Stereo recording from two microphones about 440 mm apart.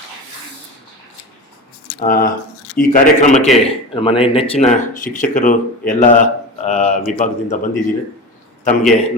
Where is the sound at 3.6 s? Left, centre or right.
Centre.